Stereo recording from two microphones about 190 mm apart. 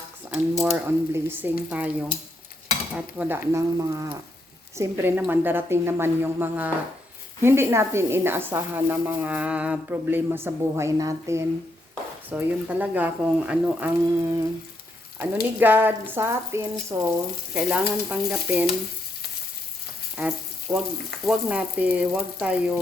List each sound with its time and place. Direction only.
0.3 s stir: centre (ahead or behind)
0.9 s a woman's voice: 10° right (ahead or behind)
17.5 s stir: 5° right (ahead or behind)
20.1 s frying: 5° right (ahead or behind)
21.2 s a woman's voice: 5° right (ahead or behind)